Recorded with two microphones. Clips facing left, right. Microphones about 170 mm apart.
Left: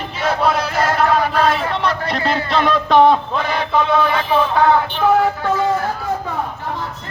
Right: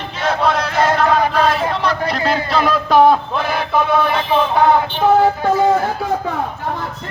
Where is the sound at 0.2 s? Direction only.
5° left (ahead or behind).